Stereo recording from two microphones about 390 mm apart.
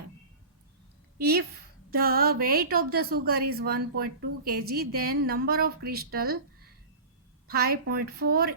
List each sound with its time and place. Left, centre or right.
1.2 s a woman's voice: right
7.4 s a woman's voice: right